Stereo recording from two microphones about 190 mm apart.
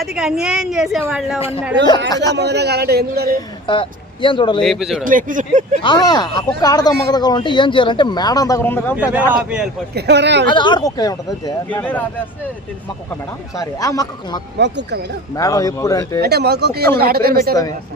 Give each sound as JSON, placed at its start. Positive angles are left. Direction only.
{"t": 0.0, "sound": "a woman's voice", "side_deg": 0}
{"t": 2.0, "sound": "speech", "side_deg": 20}
{"t": 2.3, "sound": "a man's voice", "side_deg": -60}
{"t": 3.7, "sound": "speech", "side_deg": 25}
{"t": 4.6, "sound": "a woman's voice", "side_deg": 0}
{"t": 5.0, "sound": "speech", "side_deg": -45}
{"t": 5.8, "sound": "speech", "side_deg": 25}
{"t": 9.4, "sound": "a woman's voice", "side_deg": -5}
{"t": 9.9, "sound": "a man's voice", "side_deg": -65}
{"t": 10.4, "sound": "speech", "side_deg": 25}
{"t": 13.6, "sound": "speech", "side_deg": 20}
{"t": 14.6, "sound": "a man's voice", "side_deg": -65}
{"t": 15.4, "sound": "speech", "side_deg": 20}
{"t": 16.2, "sound": "a man's voice", "side_deg": -55}